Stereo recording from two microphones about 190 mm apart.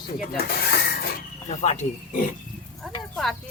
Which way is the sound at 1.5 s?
35° left (ahead or behind).